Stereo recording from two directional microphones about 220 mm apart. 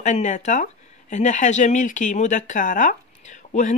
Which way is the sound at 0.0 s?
35° left (ahead or behind).